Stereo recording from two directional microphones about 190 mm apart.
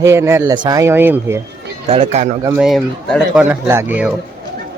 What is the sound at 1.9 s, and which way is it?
Speech, 35° right (ahead or behind).